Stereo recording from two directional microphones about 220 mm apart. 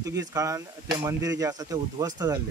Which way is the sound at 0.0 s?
15° right (ahead or behind).